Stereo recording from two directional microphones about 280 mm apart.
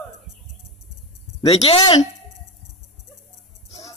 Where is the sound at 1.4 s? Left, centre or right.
Left.